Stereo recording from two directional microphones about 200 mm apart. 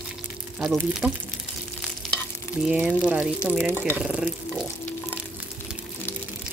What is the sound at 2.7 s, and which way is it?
Speech, 5° right (ahead or behind).